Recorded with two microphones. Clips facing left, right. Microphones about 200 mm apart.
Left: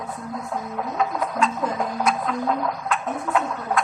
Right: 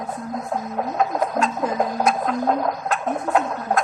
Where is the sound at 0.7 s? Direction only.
45° right (ahead or behind).